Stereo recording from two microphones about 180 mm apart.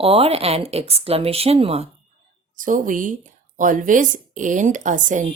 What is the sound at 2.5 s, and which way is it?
Speech, 45° right (ahead or behind).